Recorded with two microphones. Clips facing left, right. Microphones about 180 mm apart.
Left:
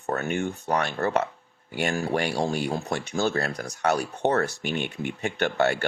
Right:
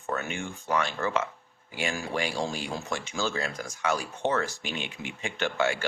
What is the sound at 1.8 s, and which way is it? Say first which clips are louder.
Speech: left 5 dB; 60° left (ahead or behind).